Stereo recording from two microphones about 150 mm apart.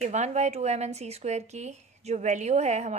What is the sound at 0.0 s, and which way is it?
A woman's voice, 50° right (ahead or behind).